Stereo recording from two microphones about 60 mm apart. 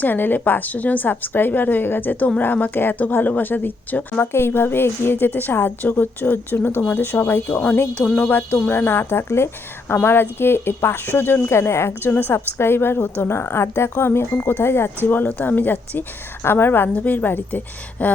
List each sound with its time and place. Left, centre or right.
0.0 s speech: left
4.2 s speech: left
7.9 s speech: left
8.7 s speech: left
11.4 s a woman's voice: left